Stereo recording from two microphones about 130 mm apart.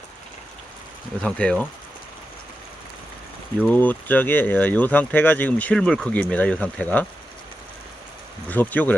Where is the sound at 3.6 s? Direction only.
15° left (ahead or behind).